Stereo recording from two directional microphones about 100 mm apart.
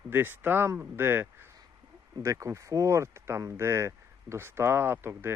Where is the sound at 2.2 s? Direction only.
30° right (ahead or behind).